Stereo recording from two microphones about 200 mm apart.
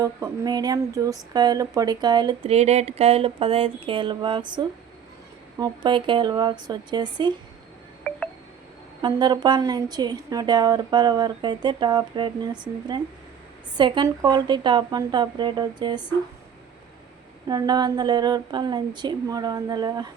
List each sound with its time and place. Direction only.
0.0 s speech: 20° right (ahead or behind)
8.1 s a sound: 5° left (ahead or behind)
9.0 s speech: 20° right (ahead or behind)
17.5 s speech: 20° right (ahead or behind)